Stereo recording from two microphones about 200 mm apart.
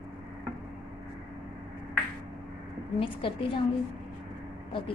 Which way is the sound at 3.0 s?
25° left (ahead or behind).